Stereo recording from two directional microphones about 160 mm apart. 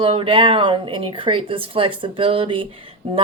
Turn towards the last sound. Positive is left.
turn(degrees=-35)  # may be behind; listen again after turning